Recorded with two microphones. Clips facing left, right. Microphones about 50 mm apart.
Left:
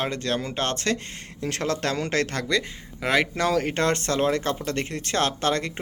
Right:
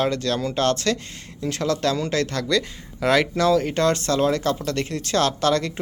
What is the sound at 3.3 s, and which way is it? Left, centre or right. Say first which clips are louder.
Speech: right 4 dB; left.